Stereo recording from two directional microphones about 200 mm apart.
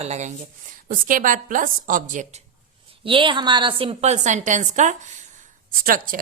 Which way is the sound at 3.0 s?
25° right (ahead or behind).